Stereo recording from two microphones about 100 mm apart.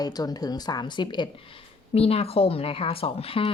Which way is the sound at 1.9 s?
85° left.